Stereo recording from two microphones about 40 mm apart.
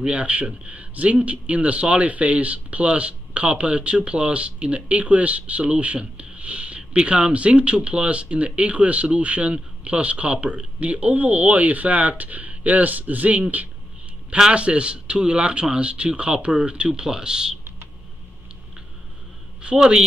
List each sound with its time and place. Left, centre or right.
0.0 s a man's voice: right
14.5 s speech: right
16.9 s speech: centre
19.6 s speech: centre